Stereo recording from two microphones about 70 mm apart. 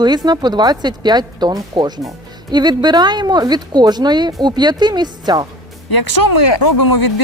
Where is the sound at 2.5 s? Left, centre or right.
Right.